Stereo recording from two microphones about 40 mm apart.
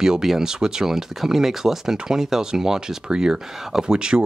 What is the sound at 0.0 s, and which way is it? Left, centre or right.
Speech, centre.